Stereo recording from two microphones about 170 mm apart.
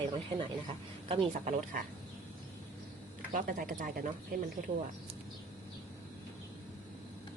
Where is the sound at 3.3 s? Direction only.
55° right (ahead or behind).